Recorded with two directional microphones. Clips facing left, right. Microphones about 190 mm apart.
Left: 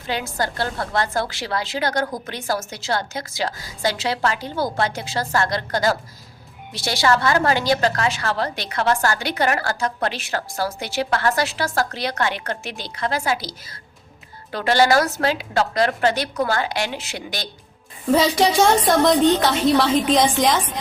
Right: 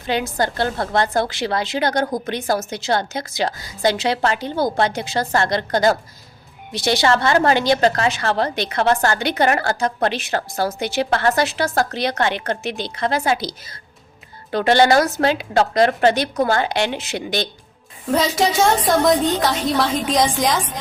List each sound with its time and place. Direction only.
0.1 s a woman's voice: 20° right (ahead or behind)
18.1 s a woman's voice: centre (ahead or behind)